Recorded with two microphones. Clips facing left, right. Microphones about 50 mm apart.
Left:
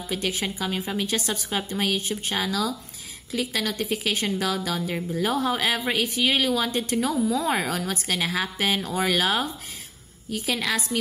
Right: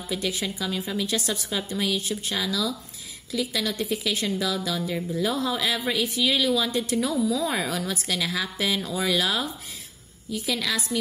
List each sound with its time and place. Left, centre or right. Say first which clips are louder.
0.1 s a woman's voice: left 1 dB; left